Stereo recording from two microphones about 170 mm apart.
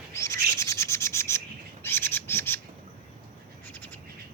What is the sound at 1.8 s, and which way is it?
Bird, 15° left (ahead or behind).